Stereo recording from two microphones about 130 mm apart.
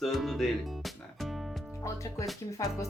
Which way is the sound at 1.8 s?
25° left (ahead or behind).